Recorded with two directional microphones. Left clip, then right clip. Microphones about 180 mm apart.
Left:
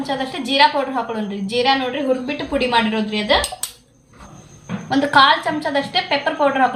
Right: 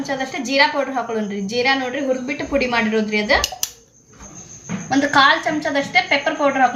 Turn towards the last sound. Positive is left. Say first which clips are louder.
# even
turn(degrees=10)  # may be behind; listen again after turning